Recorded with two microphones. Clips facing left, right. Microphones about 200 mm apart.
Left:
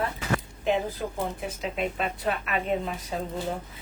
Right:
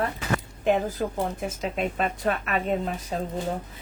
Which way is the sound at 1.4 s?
45° right (ahead or behind).